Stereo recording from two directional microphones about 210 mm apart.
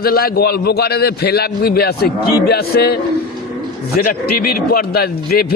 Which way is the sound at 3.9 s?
45° left (ahead or behind).